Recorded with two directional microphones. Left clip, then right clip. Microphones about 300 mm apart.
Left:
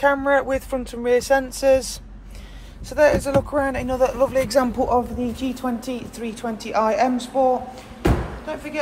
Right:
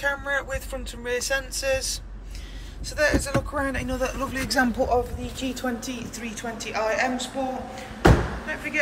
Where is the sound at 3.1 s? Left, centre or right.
Left.